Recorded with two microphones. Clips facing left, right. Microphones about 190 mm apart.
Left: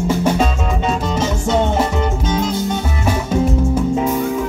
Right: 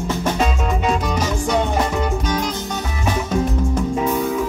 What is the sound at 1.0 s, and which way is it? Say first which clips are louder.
Music: left 2 dB; 25° left (ahead or behind).